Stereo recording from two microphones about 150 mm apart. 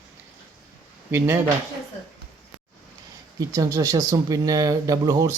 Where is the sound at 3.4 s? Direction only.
25° right (ahead or behind).